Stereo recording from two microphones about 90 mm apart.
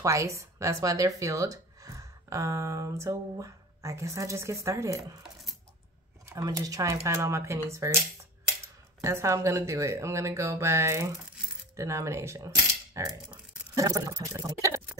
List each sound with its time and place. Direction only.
0.0 s speech: 35° right (ahead or behind)
6.2 s speech: 40° right (ahead or behind)
9.0 s speech: 30° right (ahead or behind)
11.7 s coin: 35° right (ahead or behind)
13.7 s speech: 40° right (ahead or behind)